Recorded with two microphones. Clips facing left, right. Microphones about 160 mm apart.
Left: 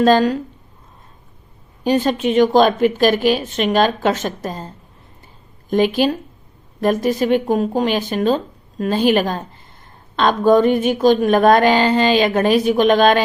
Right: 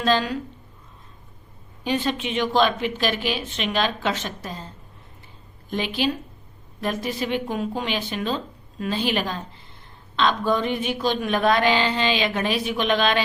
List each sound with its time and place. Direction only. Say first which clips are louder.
0.0 s speech: left 9 dB; 45° left (ahead or behind)
1.8 s speech: left 8 dB; 45° left (ahead or behind)
5.7 s speech: left 9 dB; 45° left (ahead or behind)